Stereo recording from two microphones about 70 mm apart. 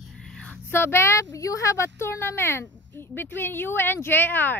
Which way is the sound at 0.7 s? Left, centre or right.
Left.